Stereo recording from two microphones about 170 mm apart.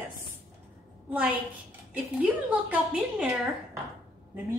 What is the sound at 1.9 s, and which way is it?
A woman's voice, 10° right (ahead or behind).